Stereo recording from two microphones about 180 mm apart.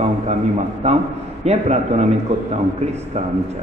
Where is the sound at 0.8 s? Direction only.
35° right (ahead or behind).